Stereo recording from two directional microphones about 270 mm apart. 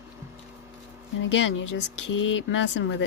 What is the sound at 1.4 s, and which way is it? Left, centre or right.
Speech, left.